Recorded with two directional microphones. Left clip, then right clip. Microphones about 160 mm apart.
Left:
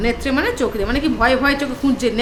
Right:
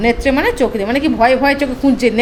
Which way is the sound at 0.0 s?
20° right (ahead or behind).